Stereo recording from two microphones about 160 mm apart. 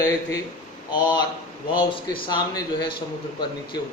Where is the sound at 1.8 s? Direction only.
30° left (ahead or behind).